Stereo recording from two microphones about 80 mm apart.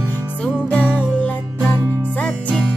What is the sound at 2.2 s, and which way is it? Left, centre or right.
Music, centre.